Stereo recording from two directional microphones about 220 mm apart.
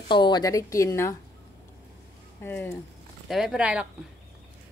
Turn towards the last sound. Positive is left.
turn(degrees=-5)  # may be behind; listen again after turning